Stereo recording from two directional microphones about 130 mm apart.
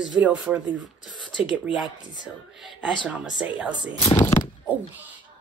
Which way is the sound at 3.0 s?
10° right (ahead or behind).